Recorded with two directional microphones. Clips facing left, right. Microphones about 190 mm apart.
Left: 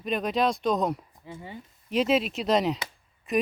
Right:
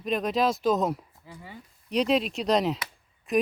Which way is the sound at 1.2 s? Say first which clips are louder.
Left 4 dB; 25° left (ahead or behind).